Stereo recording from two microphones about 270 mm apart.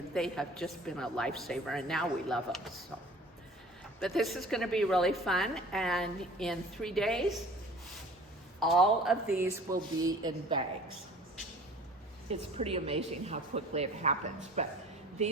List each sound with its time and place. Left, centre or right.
0.1 s a woman's voice: centre
4.0 s a woman's voice: centre
8.5 s a woman's voice: centre
12.3 s a woman's voice: right